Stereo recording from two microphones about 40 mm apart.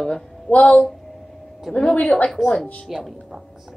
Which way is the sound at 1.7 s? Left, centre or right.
Left.